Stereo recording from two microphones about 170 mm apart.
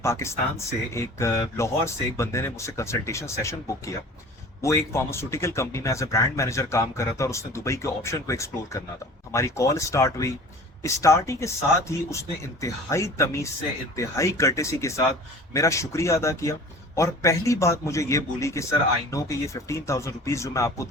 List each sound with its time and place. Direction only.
0.0 s speech: 15° left (ahead or behind)